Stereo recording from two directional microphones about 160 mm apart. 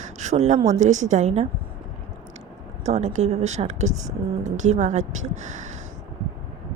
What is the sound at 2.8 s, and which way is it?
Speech, 45° right (ahead or behind).